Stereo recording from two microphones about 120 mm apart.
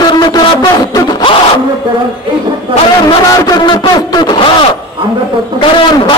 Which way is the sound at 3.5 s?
40° left (ahead or behind).